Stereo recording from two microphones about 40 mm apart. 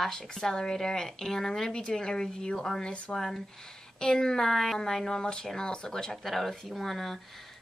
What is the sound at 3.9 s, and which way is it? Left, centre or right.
Speech, centre.